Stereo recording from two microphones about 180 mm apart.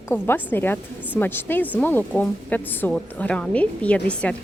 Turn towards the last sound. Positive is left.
turn(degrees=5)  # may be behind; listen again after turning